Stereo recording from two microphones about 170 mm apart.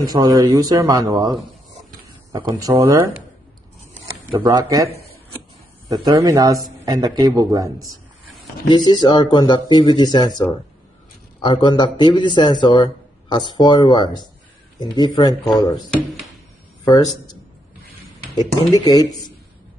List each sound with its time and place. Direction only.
0.0 s a man's voice: 20° right (ahead or behind)
2.0 s a sound: 25° right (ahead or behind)
2.7 s speech: 15° right (ahead or behind)
4.5 s a man's voice: 20° right (ahead or behind)
5.9 s a man's voice: 25° right (ahead or behind)
8.6 s speech: 25° left (ahead or behind)
16.8 s a man's voice: 25° left (ahead or behind)